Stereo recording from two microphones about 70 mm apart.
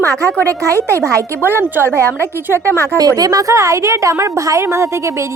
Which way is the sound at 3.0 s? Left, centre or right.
Right.